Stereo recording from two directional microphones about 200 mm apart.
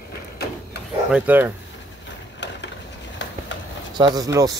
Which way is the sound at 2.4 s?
60° left (ahead or behind).